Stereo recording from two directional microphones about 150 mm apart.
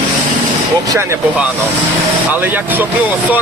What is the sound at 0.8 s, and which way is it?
Speech, 25° right (ahead or behind).